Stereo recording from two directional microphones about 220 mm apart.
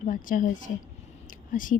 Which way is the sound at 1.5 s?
35° left (ahead or behind).